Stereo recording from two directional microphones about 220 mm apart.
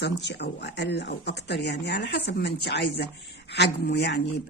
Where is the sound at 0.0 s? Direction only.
50° left (ahead or behind).